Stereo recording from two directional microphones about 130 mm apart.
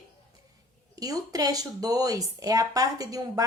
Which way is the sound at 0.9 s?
30° right (ahead or behind).